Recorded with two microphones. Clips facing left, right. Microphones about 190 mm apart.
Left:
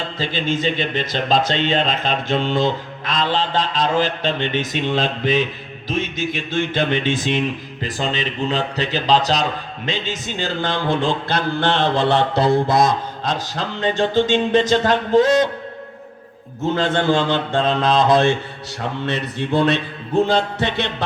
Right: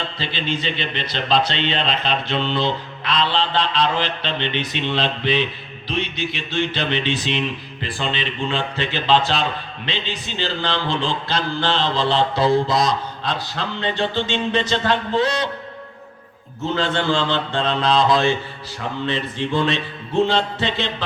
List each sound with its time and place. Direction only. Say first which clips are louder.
0.0 s speech: left 3 dB; 45° left (ahead or behind)
16.7 s speech: left 3 dB; 50° left (ahead or behind)
18.8 s speech: left 1 dB; 65° left (ahead or behind)
20.2 s speech: left 2 dB; 45° left (ahead or behind)